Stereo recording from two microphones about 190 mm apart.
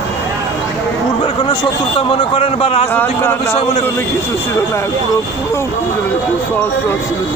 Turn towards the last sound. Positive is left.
turn(degrees=15)  # may be behind; listen again after turning